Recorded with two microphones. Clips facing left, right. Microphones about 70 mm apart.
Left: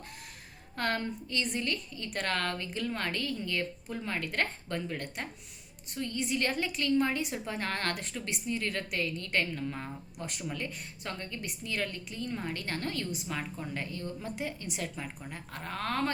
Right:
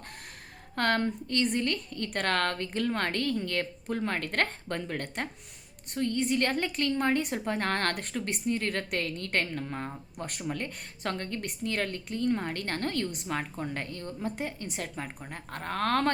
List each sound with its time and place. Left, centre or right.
0.8 s a woman's voice: right
11.1 s a woman's voice: right
14.2 s a woman's voice: right